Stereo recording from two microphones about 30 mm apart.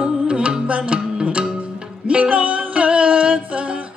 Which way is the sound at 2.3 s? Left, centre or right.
Right.